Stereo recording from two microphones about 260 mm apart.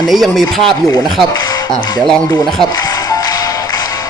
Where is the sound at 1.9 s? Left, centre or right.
Centre.